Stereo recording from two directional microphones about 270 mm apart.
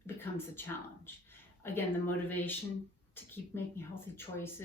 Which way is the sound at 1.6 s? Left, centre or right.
Centre.